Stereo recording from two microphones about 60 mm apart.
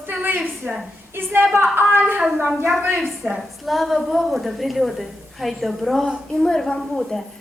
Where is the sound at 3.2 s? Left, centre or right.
Centre.